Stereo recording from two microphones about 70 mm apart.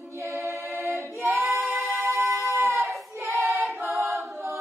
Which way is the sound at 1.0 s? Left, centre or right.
Right.